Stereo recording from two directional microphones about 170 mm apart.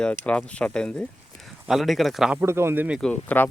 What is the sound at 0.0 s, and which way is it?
Speech, 5° left (ahead or behind).